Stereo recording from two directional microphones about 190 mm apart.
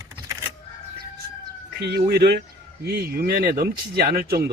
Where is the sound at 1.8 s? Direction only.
55° right (ahead or behind).